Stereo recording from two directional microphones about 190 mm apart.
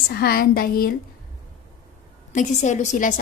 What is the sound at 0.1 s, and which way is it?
Speech, 55° left (ahead or behind).